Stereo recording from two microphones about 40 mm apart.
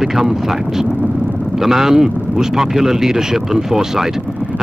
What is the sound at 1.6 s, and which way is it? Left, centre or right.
Speech, centre.